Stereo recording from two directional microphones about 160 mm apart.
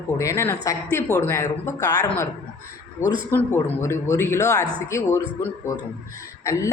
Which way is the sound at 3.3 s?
15° left (ahead or behind).